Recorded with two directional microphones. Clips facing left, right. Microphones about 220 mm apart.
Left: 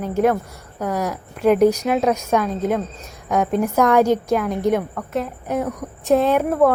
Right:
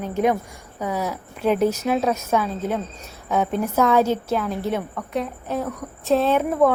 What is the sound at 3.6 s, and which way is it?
A woman's voice, 15° left (ahead or behind).